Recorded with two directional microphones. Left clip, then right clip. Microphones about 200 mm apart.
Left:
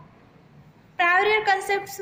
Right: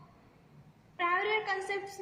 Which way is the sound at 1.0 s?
50° left (ahead or behind).